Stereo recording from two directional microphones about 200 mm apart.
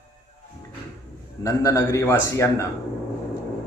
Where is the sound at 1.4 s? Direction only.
15° left (ahead or behind).